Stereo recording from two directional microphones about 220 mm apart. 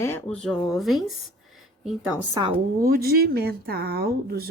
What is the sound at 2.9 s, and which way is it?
Speech, 45° right (ahead or behind).